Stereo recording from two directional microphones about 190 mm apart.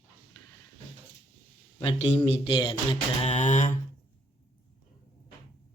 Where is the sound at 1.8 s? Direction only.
30° left (ahead or behind).